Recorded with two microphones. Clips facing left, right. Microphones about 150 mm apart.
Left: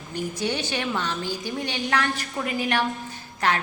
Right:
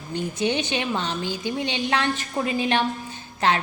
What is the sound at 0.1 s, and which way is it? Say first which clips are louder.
A woman's voice: right 3 dB; 20° right (ahead or behind).